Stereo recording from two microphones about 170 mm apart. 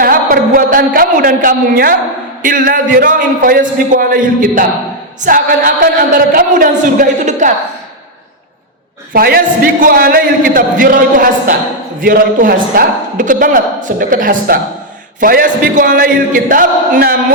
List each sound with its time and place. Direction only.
0.0 s a man's voice: 55° right (ahead or behind)
9.1 s a man's voice: 60° right (ahead or behind)